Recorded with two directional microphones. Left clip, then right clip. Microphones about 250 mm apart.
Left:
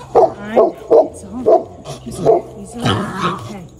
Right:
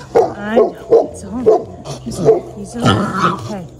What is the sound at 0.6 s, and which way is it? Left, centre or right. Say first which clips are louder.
Speech: left 1 dB; left.